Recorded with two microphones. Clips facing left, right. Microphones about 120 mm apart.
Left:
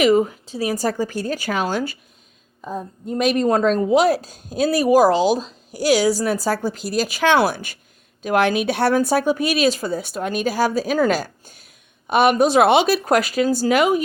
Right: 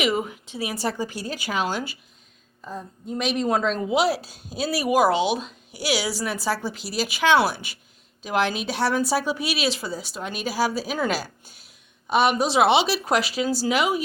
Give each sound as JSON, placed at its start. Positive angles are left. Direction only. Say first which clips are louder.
{"t": 0.0, "sound": "speech", "louder": "left 8 dB", "side_deg": 40}
{"t": 2.6, "sound": "speech", "louder": "left 6 dB", "side_deg": 55}